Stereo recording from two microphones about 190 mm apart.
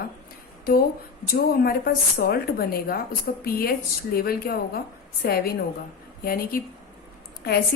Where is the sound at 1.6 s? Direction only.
50° left (ahead or behind).